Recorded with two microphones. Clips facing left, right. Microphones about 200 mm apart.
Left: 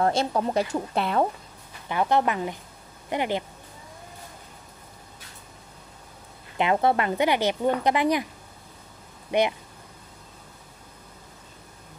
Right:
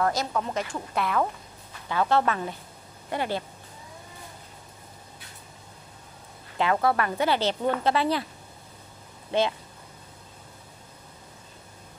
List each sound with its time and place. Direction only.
0.0 s speech: 30° left (ahead or behind)
1.9 s speech: 15° left (ahead or behind)
6.6 s speech: 20° left (ahead or behind)
9.3 s speech: 15° left (ahead or behind)